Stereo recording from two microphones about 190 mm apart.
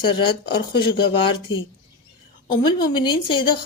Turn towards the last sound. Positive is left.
turn(degrees=25)  # may be behind; listen again after turning